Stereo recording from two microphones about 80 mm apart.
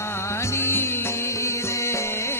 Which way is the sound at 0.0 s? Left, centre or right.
Left.